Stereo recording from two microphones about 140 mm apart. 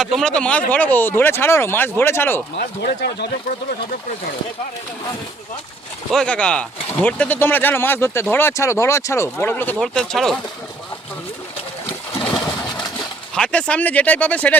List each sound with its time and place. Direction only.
0.0 s speech: 5° left (ahead or behind)
6.1 s speech: 5° left (ahead or behind)
9.7 s speech: 5° left (ahead or behind)
13.3 s speech: 10° left (ahead or behind)